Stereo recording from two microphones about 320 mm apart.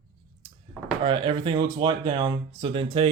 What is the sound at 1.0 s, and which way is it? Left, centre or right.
Speech, centre.